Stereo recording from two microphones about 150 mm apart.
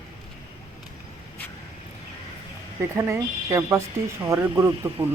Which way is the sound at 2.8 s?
20° right (ahead or behind).